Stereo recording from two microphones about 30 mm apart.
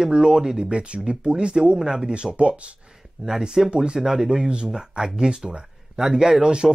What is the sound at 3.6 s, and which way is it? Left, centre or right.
Speech, centre.